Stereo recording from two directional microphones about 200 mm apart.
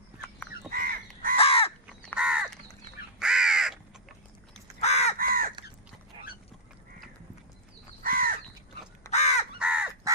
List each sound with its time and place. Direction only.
0.7 s crow: 45° right (ahead or behind)
1.4 s crow: 30° left (ahead or behind)
2.1 s crow: 5° right (ahead or behind)
4.8 s crow: 35° left (ahead or behind)
5.1 s crow: 45° right (ahead or behind)
6.1 s a sound: 25° right (ahead or behind)
8.0 s crow: 45° right (ahead or behind)
9.0 s crow: 35° left (ahead or behind)
9.6 s crow: 5° right (ahead or behind)